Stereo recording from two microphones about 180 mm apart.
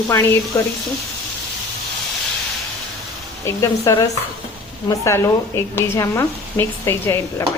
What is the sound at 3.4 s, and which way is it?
Speech, 15° left (ahead or behind).